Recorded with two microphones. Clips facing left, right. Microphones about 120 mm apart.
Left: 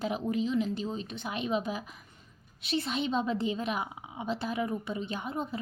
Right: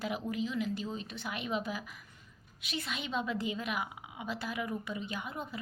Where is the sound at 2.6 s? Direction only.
30° left (ahead or behind).